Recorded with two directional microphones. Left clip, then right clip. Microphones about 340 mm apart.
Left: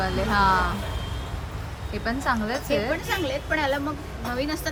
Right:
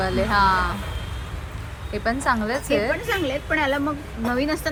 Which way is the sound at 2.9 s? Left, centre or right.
Right.